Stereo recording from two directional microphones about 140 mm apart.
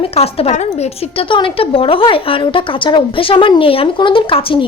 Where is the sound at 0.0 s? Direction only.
45° left (ahead or behind).